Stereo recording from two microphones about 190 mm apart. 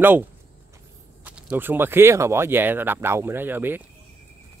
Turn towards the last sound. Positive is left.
turn(degrees=-10)  # may be behind; listen again after turning